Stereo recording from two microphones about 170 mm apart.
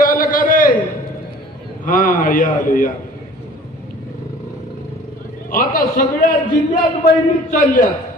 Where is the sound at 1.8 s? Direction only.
55° left (ahead or behind).